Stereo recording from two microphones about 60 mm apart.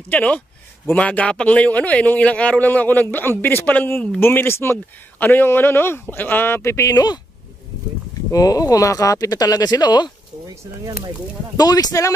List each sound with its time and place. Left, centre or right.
0.1 s a man's voice: left
8.3 s speech: left
10.4 s speech: right
11.5 s speech: left